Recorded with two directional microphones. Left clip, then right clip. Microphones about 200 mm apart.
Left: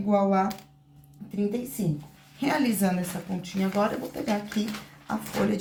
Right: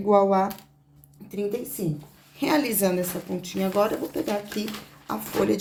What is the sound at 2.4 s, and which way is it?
Speech, 55° right (ahead or behind).